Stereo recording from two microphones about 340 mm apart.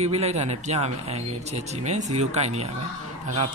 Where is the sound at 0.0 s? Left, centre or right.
Centre.